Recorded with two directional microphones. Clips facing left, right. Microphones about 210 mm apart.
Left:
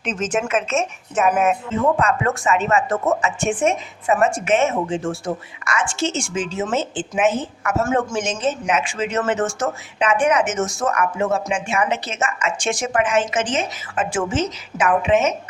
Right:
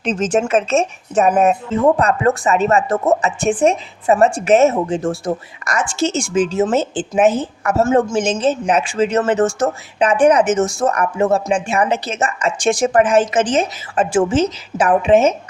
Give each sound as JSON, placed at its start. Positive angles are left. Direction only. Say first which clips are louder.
{"t": 0.0, "sound": "a woman's voice", "louder": "right 5 dB", "side_deg": -30}